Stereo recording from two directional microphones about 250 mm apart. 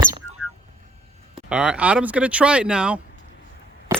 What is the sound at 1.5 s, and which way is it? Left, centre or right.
Speech, centre.